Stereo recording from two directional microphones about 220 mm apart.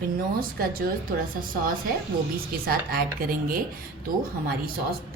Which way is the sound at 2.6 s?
40° right (ahead or behind).